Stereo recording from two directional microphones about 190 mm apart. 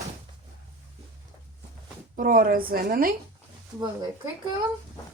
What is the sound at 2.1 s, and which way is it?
Speech, 45° right (ahead or behind).